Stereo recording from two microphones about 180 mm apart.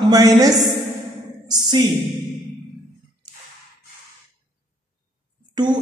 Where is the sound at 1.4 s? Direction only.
25° right (ahead or behind).